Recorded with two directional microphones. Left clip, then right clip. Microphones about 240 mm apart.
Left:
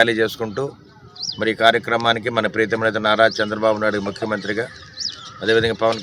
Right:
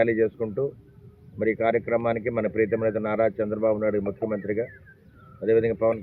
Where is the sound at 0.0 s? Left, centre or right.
Centre.